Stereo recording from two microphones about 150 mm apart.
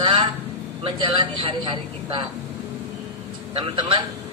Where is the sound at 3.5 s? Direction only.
35° right (ahead or behind).